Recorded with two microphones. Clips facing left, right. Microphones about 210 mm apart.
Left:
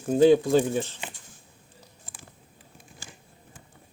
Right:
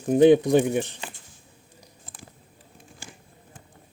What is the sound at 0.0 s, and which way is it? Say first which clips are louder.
Speech: right 2 dB; 15° right (ahead or behind).